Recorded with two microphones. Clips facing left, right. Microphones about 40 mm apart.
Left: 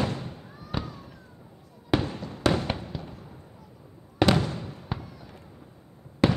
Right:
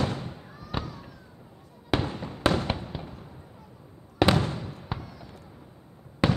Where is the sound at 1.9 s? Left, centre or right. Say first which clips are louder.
Left 1 dB; centre.